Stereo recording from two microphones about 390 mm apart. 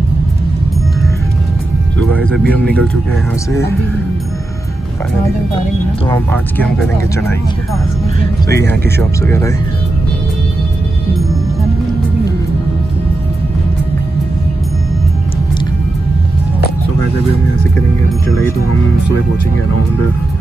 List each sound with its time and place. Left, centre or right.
2.2 s speech: centre
2.6 s speech: right
6.0 s speech: centre
8.6 s speech: centre